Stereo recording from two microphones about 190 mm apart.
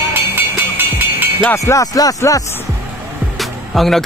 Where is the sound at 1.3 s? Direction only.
15° left (ahead or behind).